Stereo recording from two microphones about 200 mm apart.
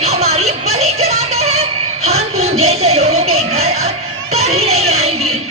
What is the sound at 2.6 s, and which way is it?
Music, 30° right (ahead or behind).